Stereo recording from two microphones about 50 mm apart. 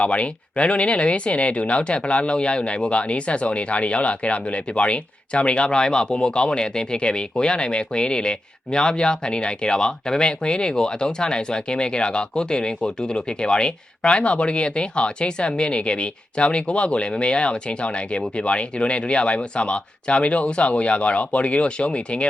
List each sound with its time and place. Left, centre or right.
0.0 s speech: left